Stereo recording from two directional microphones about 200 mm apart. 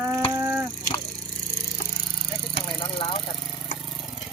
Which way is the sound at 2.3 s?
25° left (ahead or behind).